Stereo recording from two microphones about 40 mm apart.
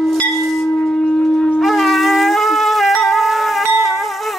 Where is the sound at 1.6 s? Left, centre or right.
Centre.